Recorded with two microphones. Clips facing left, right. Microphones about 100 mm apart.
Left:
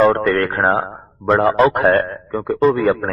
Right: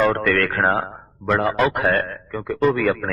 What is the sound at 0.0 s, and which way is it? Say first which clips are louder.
A man's voice: left 4 dB; 25° left (ahead or behind).